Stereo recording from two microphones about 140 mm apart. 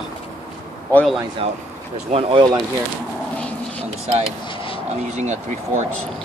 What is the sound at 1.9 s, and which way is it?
Speech, 40° right (ahead or behind).